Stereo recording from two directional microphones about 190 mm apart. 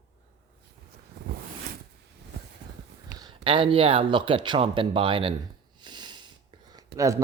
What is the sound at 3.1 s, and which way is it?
Speech, 25° right (ahead or behind).